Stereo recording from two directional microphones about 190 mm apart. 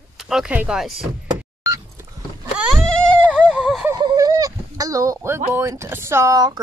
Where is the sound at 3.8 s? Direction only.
20° right (ahead or behind).